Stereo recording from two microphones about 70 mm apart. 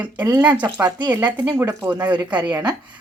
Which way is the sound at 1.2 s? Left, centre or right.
Right.